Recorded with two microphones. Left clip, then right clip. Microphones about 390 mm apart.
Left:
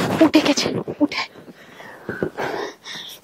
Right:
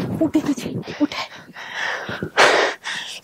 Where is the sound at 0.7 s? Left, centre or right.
Centre.